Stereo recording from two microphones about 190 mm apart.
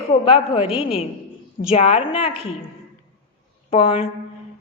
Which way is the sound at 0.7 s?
5° right (ahead or behind).